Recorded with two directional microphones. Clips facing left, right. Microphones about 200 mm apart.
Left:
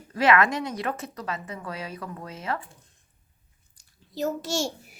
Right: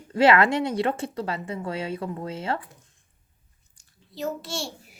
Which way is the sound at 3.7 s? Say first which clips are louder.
Left 5 dB; 40° left (ahead or behind).